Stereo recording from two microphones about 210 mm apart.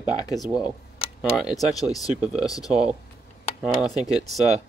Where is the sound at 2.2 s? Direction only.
5° right (ahead or behind).